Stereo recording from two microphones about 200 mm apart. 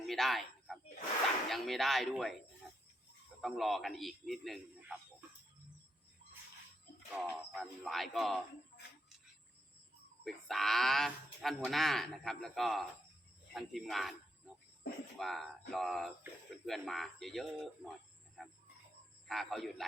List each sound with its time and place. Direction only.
0.0 s a sound: centre (ahead or behind)
1.5 s speech: centre (ahead or behind)
3.4 s speech: centre (ahead or behind)
7.1 s speech: centre (ahead or behind)
10.2 s speech: centre (ahead or behind)
15.2 s speech: centre (ahead or behind)
18.4 s music: centre (ahead or behind)
19.3 s speech: centre (ahead or behind)